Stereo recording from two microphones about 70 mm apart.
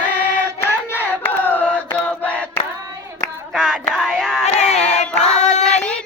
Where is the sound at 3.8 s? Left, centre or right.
Centre.